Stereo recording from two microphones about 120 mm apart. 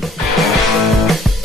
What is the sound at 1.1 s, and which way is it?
Music, centre (ahead or behind).